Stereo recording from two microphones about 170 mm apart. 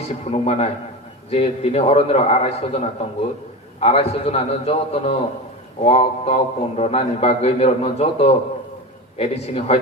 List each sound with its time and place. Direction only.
0.3 s a man's voice: 35° left (ahead or behind)